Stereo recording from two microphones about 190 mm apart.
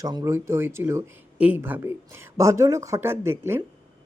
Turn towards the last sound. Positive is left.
turn(degrees=-15)  # may be behind; listen again after turning